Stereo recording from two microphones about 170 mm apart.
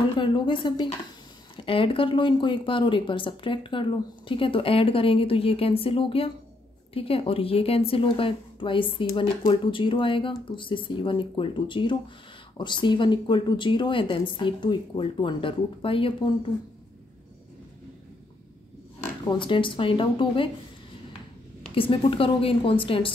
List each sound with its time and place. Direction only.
0.2 s speech: 30° left (ahead or behind)
19.2 s speech: 30° left (ahead or behind)
21.7 s speech: 30° left (ahead or behind)